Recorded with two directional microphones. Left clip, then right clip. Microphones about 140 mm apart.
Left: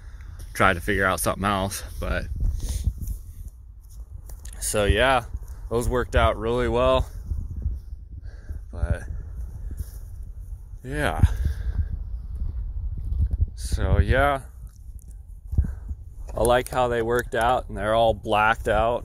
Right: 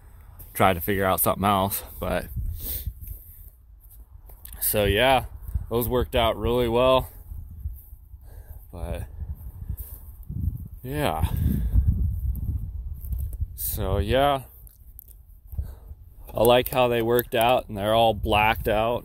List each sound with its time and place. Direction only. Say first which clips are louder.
0.5 s speech: left 1 dB; 30° right (ahead or behind)
2.0 s a sound: right 3 dB; 65° right (ahead or behind); by 3.2 s 90° right
4.4 s speech: even; 35° right (ahead or behind)
8.3 s a sound: left 1 dB; 60° right (ahead or behind)
10.8 s speech: even; 55° right (ahead or behind)
13.6 s speech: right 1 dB; 60° right (ahead or behind)
16.3 s speech: right 2 dB; 75° right (ahead or behind); by 19.0 s 55° right (ahead or behind)